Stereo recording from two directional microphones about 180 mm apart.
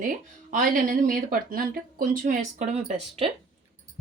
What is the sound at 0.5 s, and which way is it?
Speech, 50° right (ahead or behind).